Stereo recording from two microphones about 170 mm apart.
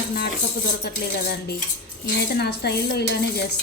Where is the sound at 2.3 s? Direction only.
70° left (ahead or behind).